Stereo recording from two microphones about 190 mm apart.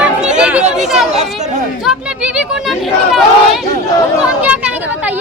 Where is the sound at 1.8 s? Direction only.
5° right (ahead or behind).